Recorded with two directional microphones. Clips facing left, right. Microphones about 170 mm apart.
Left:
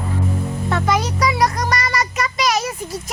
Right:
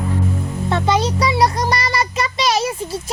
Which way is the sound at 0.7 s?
30° right (ahead or behind).